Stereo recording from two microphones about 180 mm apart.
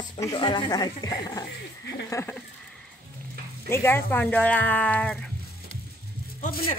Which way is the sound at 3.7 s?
15° left (ahead or behind).